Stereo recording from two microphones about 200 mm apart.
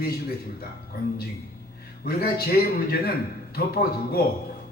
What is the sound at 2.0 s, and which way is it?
Speech, 50° left (ahead or behind).